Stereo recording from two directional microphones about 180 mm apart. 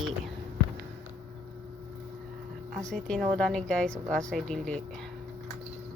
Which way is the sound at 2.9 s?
5° left (ahead or behind).